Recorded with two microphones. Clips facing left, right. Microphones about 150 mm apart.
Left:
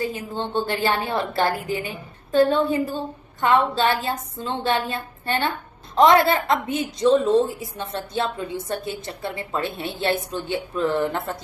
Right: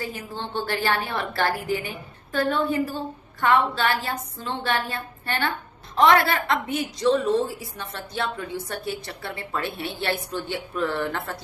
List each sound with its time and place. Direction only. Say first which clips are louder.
0.5 s a woman's voice: left 2 dB; 20° left (ahead or behind)